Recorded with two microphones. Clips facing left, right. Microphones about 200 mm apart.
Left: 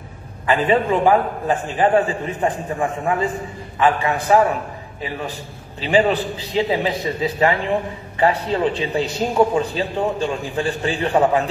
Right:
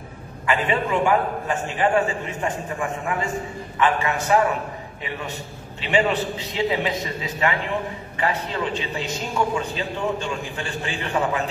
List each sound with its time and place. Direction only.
0.5 s a man's voice: 35° left (ahead or behind)